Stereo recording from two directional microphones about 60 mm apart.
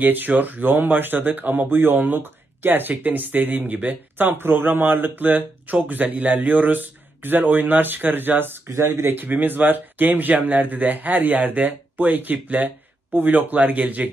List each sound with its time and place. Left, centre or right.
0.0 s speech: right
9.1 s speech: right